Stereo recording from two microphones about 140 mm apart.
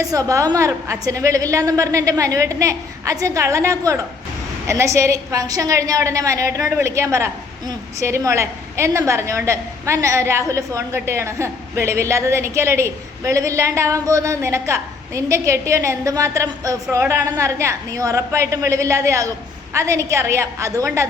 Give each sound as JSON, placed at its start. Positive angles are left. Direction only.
{"t": 0.0, "sound": "a woman's voice", "side_deg": -25}